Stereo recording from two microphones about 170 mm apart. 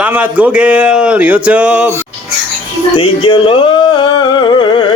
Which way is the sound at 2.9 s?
30° left (ahead or behind).